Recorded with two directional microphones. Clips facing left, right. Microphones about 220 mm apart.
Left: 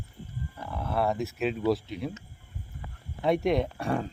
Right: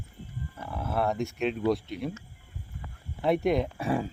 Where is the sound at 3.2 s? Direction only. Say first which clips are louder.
Even; centre (ahead or behind).